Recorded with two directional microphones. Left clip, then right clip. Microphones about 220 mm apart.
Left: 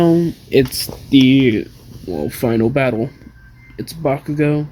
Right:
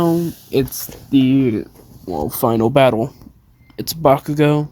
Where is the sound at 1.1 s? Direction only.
20° right (ahead or behind).